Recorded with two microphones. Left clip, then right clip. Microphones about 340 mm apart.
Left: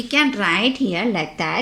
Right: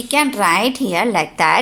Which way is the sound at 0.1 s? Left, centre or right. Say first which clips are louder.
Right 3 dB; centre.